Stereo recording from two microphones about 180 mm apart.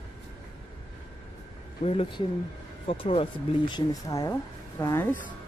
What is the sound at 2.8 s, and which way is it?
Speech, 30° left (ahead or behind).